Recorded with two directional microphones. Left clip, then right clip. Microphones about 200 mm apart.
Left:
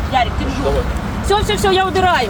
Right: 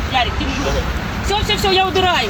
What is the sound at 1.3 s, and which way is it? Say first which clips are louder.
Speech: left 2 dB; 20° left (ahead or behind).